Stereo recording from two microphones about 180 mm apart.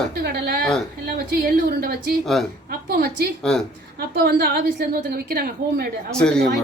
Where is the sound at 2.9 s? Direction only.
60° right (ahead or behind).